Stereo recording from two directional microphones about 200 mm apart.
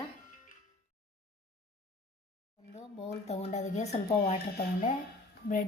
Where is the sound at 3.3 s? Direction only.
35° left (ahead or behind).